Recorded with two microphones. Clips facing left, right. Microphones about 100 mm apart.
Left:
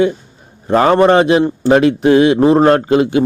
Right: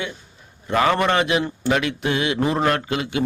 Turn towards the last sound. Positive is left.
turn(degrees=35)  # may be behind; listen again after turning